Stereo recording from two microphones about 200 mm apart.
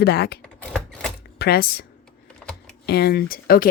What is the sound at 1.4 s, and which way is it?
Speech, 55° left (ahead or behind).